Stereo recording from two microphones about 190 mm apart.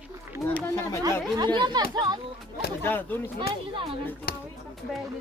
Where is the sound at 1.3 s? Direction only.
25° right (ahead or behind).